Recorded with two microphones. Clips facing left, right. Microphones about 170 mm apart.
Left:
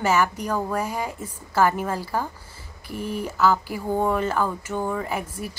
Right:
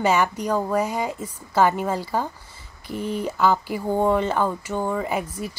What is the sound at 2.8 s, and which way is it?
Speech, 10° left (ahead or behind).